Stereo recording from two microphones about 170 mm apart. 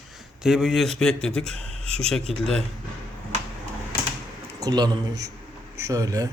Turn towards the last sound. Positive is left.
turn(degrees=-20)  # may be behind; listen again after turning